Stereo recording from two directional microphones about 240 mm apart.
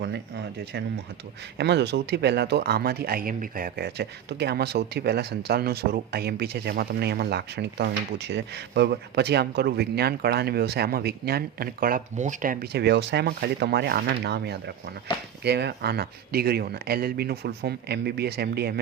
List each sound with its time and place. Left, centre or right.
0.0 s speech: right